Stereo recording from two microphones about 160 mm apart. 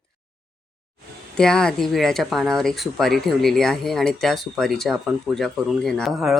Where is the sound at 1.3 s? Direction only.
5° left (ahead or behind).